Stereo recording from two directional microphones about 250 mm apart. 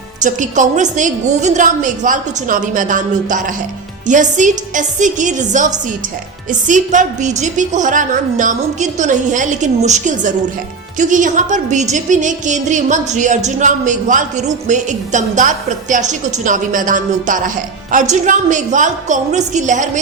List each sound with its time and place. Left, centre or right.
0.2 s a woman's voice: right